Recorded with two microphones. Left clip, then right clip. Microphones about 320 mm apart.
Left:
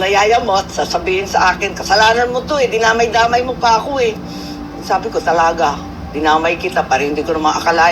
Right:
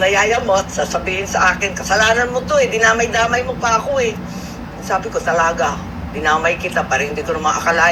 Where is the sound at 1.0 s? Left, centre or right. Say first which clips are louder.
Left 4 dB; left.